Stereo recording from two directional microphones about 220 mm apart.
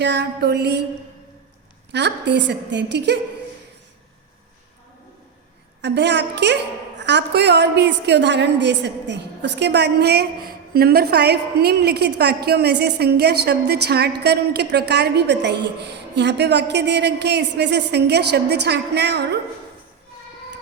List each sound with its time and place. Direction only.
0.0 s a woman's voice: 50° right (ahead or behind)
1.9 s a woman's voice: 50° right (ahead or behind)
5.8 s a woman's voice: 50° right (ahead or behind)